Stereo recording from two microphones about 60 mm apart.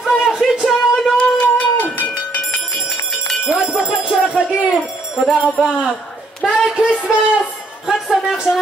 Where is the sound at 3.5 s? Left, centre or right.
Centre.